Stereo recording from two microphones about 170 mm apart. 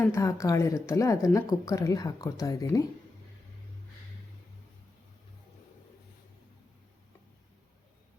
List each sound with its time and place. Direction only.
0.0 s a woman's voice: 15° left (ahead or behind)